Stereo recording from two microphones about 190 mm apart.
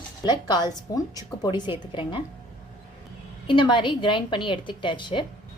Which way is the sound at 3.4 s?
25° left (ahead or behind).